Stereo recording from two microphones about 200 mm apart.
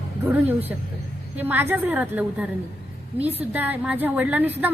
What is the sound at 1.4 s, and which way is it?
A woman's voice, 10° right (ahead or behind).